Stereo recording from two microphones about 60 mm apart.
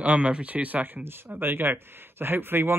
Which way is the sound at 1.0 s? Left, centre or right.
Right.